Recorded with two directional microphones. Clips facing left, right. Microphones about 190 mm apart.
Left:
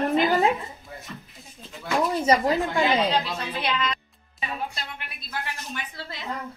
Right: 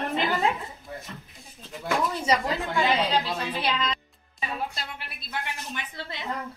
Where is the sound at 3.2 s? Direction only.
30° right (ahead or behind).